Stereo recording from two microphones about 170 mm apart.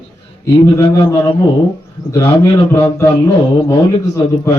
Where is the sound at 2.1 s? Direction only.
15° left (ahead or behind).